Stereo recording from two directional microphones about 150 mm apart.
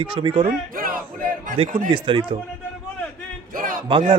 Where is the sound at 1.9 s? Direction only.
35° right (ahead or behind).